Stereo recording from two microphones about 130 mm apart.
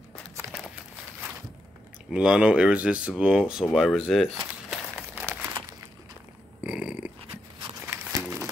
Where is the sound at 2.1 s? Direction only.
5° right (ahead or behind).